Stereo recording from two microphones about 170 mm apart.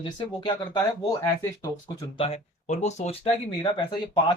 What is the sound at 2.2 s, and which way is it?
Speech, 40° left (ahead or behind).